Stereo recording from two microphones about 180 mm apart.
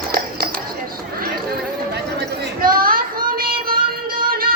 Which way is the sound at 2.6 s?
55° right (ahead or behind).